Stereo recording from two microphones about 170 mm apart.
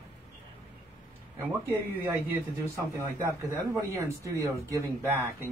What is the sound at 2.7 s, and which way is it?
Speech, 15° right (ahead or behind).